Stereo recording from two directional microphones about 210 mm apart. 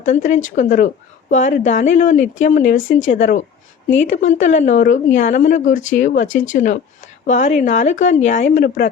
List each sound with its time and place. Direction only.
0.0 s speech: 35° left (ahead or behind)